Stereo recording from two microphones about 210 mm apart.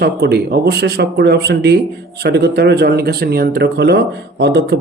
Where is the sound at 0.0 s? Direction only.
50° right (ahead or behind).